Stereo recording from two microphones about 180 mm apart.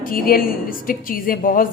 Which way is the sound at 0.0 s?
55° left (ahead or behind).